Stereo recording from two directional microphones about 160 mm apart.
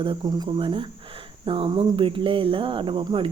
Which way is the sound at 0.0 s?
30° right (ahead or behind).